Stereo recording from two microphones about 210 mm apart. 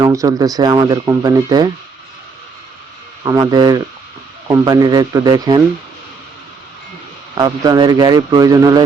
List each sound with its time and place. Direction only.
0.0 s speech: 15° right (ahead or behind)
3.2 s speech: 15° right (ahead or behind)
7.3 s speech: 20° right (ahead or behind)